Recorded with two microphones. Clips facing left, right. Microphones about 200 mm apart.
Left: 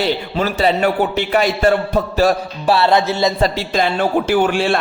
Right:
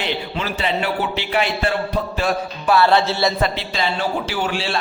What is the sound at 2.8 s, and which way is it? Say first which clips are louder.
Music: even; 15° left (ahead or behind).